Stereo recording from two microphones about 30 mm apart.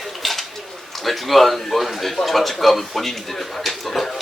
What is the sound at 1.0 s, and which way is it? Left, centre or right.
A man's voice, centre.